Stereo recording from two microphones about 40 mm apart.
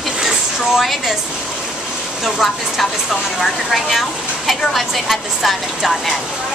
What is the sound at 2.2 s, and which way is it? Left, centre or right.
A woman's voice, centre.